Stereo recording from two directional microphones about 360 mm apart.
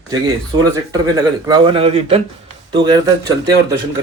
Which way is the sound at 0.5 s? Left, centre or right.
Centre.